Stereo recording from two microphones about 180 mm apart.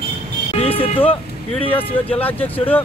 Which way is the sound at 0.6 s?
30° left (ahead or behind).